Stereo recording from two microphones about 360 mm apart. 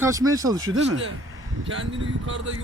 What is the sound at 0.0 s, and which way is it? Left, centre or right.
Speech, centre.